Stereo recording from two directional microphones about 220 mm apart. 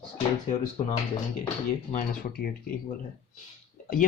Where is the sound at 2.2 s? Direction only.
45° left (ahead or behind).